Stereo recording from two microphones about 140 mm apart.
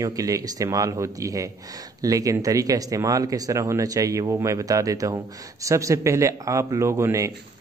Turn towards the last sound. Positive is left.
turn(degrees=-20)  # may be behind; listen again after turning